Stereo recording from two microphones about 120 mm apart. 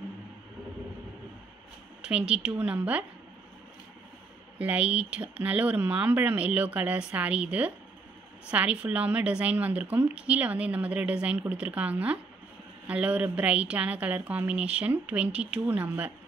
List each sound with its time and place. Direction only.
2.0 s a woman's voice: 10° right (ahead or behind)
4.6 s a woman's voice: 10° right (ahead or behind)